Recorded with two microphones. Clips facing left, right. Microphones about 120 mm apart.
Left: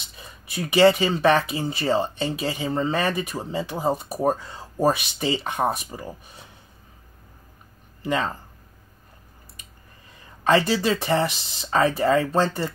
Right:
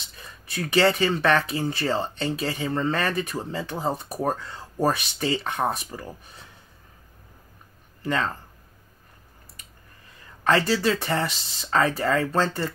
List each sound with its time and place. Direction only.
0.1 s speech: 15° left (ahead or behind)
8.0 s speech: 20° left (ahead or behind)
10.4 s speech: 20° left (ahead or behind)